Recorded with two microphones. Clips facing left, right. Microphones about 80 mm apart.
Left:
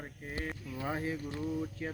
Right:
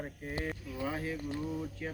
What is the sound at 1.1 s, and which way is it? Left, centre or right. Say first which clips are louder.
Speech: even; centre.